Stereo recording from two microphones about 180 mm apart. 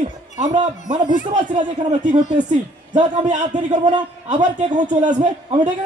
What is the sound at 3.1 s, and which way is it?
Speech, 45° right (ahead or behind).